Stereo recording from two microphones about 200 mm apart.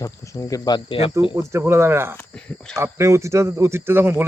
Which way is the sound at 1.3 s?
15° right (ahead or behind).